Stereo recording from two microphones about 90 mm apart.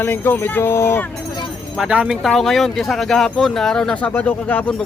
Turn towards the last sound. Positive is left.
turn(degrees=15)  # may be behind; listen again after turning